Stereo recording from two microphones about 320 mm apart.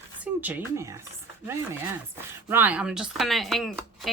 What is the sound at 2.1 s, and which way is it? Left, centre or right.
A woman's voice, centre.